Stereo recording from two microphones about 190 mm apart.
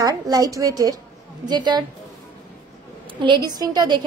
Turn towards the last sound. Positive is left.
turn(degrees=-20)  # may be behind; listen again after turning